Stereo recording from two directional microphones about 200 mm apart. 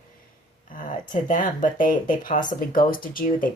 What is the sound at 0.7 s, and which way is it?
Speech, 40° left (ahead or behind).